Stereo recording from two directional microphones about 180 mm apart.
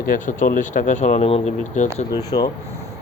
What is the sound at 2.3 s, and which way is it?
Speech, 25° left (ahead or behind).